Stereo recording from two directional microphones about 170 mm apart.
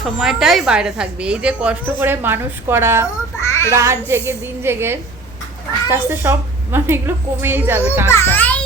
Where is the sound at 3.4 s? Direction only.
15° left (ahead or behind).